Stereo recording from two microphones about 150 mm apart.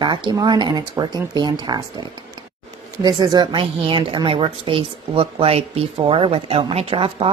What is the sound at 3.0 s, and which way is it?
A woman's voice, 30° right (ahead or behind).